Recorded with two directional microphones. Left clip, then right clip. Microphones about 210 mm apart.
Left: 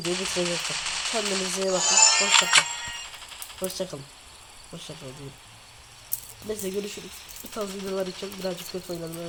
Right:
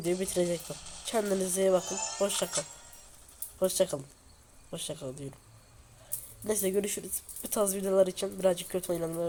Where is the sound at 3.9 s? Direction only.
5° right (ahead or behind).